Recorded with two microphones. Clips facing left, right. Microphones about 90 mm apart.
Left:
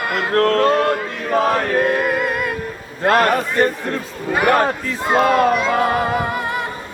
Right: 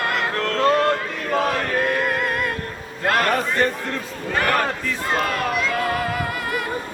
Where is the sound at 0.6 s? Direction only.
10° left (ahead or behind).